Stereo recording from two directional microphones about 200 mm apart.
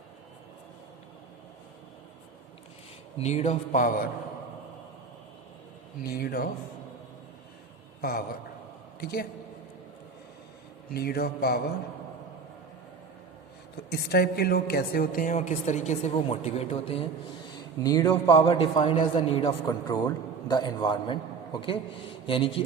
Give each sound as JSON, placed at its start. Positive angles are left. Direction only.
{"t": 3.2, "sound": "a woman's voice", "side_deg": 35}
{"t": 6.0, "sound": "speech", "side_deg": 50}
{"t": 9.0, "sound": "a man's voice", "side_deg": 50}
{"t": 10.9, "sound": "speech", "side_deg": 50}
{"t": 13.9, "sound": "a woman's voice", "side_deg": 50}
{"t": 17.8, "sound": "a man's voice", "side_deg": 15}
{"t": 18.3, "sound": "a man's voice", "side_deg": 25}